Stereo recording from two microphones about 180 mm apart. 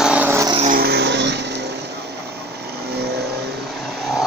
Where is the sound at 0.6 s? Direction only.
55° right (ahead or behind); by 1.5 s 75° right (ahead or behind).